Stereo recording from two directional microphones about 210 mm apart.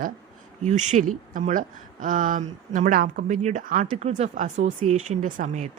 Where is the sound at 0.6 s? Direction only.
35° right (ahead or behind).